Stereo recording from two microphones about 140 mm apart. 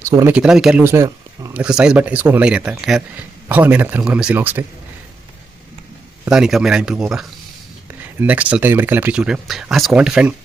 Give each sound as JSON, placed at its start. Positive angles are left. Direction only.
{"t": 0.0, "sound": "a sound", "side_deg": -20}
{"t": 0.3, "sound": "speech", "side_deg": -5}
{"t": 0.8, "sound": "speech", "side_deg": -20}
{"t": 1.5, "sound": "speech", "side_deg": -5}
{"t": 6.3, "sound": "speech", "side_deg": -5}